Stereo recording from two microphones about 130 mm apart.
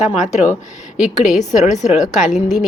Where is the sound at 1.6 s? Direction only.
60° left (ahead or behind).